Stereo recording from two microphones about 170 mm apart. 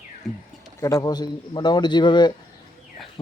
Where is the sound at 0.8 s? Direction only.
20° left (ahead or behind).